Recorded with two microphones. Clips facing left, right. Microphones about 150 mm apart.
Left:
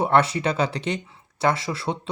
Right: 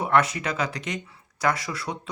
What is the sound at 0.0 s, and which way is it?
Speech, 30° left (ahead or behind).